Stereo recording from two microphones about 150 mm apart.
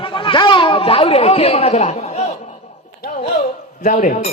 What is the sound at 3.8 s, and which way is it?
Speech, 60° left (ahead or behind).